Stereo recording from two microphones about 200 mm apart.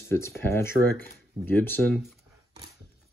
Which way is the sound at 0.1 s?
10° left (ahead or behind).